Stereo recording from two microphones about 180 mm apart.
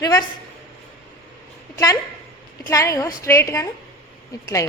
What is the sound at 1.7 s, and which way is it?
A woman's voice, 20° left (ahead or behind).